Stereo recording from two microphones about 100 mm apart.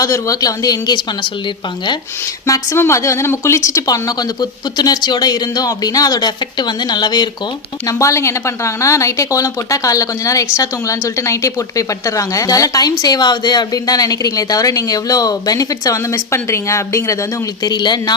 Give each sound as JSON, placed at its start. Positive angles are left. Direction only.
{"t": 0.0, "sound": "speech", "side_deg": 35}
{"t": 2.2, "sound": "speech", "side_deg": 30}
{"t": 7.9, "sound": "speech", "side_deg": 30}
{"t": 17.7, "sound": "speech", "side_deg": 45}